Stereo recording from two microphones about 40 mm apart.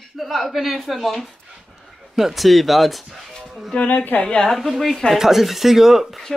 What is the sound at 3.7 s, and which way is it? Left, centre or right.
Speech, left.